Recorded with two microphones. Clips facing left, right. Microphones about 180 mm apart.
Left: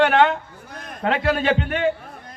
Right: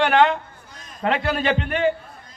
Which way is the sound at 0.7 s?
60° left (ahead or behind).